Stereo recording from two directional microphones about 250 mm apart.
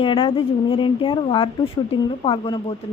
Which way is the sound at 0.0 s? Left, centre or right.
Left.